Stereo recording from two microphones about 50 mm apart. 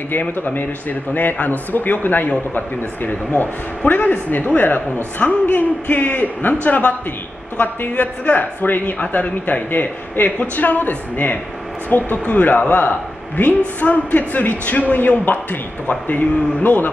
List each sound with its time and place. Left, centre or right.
0.1 s a man's voice: left